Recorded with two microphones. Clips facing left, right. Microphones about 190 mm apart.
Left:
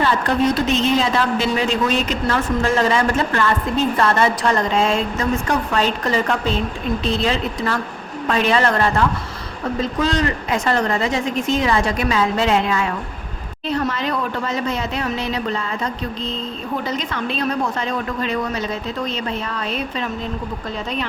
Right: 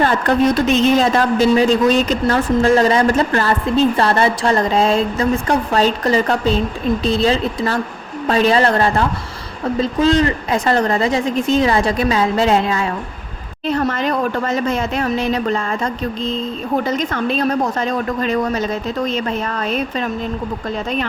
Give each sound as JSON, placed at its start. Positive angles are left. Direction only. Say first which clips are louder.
{"t": 0.7, "sound": "a woman's voice", "louder": "right 4 dB", "side_deg": -50}
{"t": 13.7, "sound": "speech", "louder": "right 3 dB", "side_deg": -50}